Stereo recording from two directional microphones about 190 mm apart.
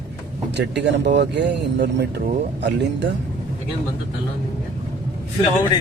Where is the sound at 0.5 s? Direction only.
65° right (ahead or behind).